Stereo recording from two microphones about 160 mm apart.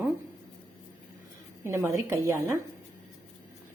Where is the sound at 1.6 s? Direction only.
15° right (ahead or behind).